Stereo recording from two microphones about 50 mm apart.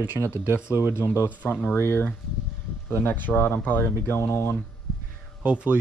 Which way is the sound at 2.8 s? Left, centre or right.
Left.